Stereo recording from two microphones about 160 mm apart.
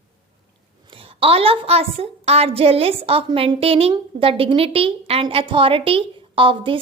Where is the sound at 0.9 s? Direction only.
35° right (ahead or behind).